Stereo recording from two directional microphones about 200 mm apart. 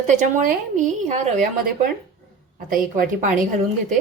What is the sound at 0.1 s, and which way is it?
Speech, 40° right (ahead or behind).